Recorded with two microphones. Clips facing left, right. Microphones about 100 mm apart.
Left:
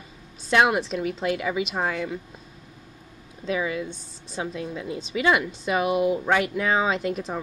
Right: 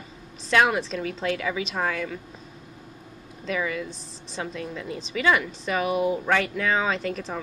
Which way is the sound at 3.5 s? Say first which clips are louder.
Left 2 dB; 15° left (ahead or behind).